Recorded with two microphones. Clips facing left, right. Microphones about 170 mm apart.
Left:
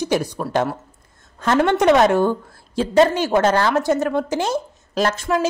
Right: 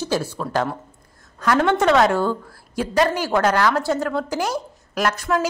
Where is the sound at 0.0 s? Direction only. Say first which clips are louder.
Left 3 dB; 15° left (ahead or behind).